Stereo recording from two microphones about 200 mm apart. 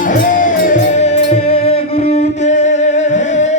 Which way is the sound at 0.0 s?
40° left (ahead or behind).